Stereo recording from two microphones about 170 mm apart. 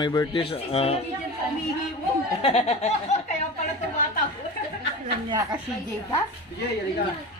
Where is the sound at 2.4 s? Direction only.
35° left (ahead or behind).